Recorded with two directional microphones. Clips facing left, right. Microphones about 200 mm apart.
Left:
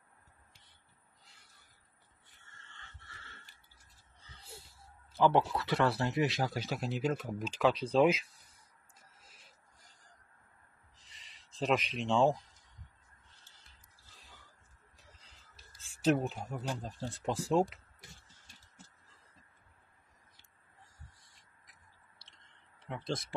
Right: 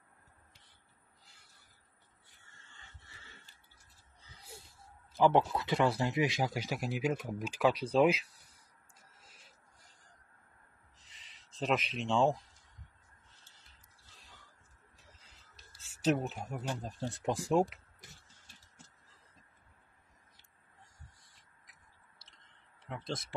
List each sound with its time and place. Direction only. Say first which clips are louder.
5.1 s speech: right 1 dB; 15° right (ahead or behind); by 8.3 s centre (ahead or behind)
11.5 s speech: left 1 dB; centre (ahead or behind)
16.3 s speech: even; 5° right (ahead or behind)
17.0 s speech: right 2 dB; 15° right (ahead or behind)
22.8 s speech: left 2 dB; centre (ahead or behind)